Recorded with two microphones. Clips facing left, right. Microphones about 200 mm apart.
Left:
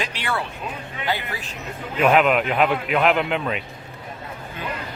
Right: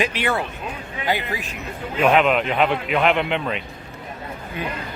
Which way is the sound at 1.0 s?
15° right (ahead or behind).